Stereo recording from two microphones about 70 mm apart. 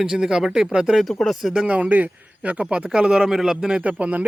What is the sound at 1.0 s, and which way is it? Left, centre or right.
Speech, centre.